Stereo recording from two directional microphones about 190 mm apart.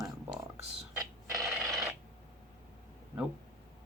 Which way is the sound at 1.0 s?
15° right (ahead or behind).